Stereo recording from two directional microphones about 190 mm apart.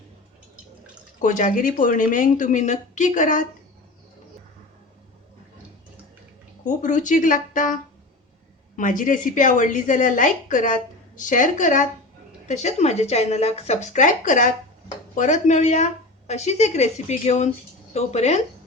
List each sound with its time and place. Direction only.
1.2 s a woman's voice: 40° left (ahead or behind)
6.7 s a woman's voice: 40° left (ahead or behind)